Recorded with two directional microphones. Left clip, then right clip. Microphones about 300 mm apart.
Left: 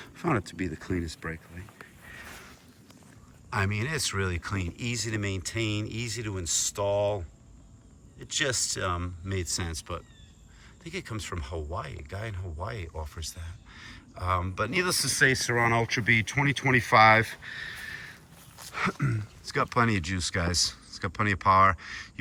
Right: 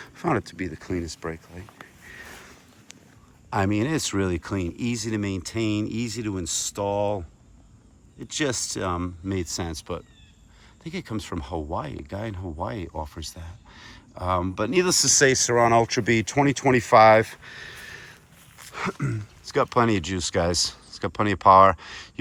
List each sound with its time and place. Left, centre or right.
0.0 s speech: centre
3.5 s speech: centre
8.3 s speech: centre